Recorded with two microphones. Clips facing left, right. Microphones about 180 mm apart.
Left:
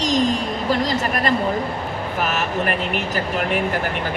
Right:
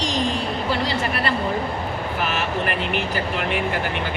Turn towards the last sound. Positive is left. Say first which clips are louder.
# left 2 dB
turn(degrees=45)  # may be behind; listen again after turning